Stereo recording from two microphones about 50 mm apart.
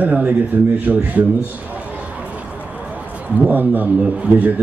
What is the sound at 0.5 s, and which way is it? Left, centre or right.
Speech, right.